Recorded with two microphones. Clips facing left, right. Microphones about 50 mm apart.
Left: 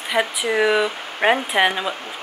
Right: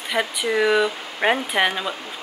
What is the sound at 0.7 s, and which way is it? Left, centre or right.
Speech, centre.